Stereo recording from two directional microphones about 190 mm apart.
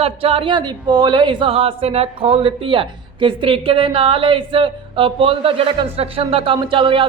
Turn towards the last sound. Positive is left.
turn(degrees=-25)  # may be behind; listen again after turning